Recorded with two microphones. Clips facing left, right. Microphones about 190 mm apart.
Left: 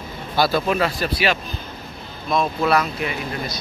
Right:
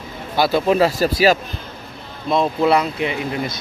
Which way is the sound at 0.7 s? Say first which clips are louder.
Right 6 dB; 35° right (ahead or behind).